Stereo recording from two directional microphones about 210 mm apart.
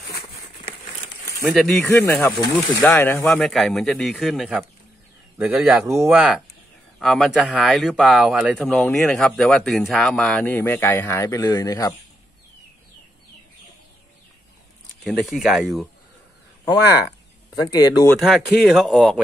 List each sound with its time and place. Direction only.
1.5 s speech: centre (ahead or behind)
15.0 s speech: centre (ahead or behind)
17.6 s speech: 20° left (ahead or behind)
18.2 s speech: centre (ahead or behind)